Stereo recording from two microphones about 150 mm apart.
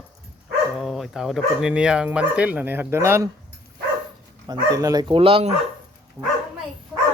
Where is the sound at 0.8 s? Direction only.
Centre (ahead or behind); by 3.3 s 15° right (ahead or behind).